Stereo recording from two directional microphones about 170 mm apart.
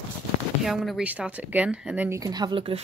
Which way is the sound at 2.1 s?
20° right (ahead or behind).